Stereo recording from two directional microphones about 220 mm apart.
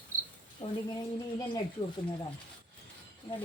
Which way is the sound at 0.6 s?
30° left (ahead or behind).